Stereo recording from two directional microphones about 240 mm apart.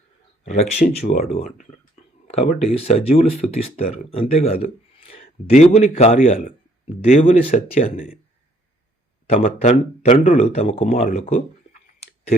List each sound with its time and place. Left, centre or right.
1.0 s speech: left
9.3 s speech: left